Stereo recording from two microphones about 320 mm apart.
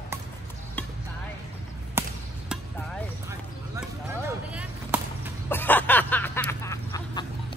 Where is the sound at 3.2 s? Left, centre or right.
Centre.